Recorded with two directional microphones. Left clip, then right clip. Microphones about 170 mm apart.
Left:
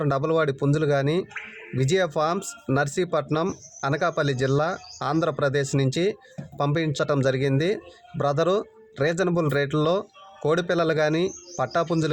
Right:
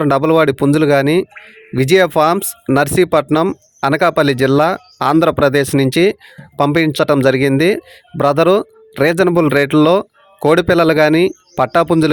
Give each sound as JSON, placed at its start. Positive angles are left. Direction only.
{"t": 0.0, "sound": "speech", "side_deg": -55}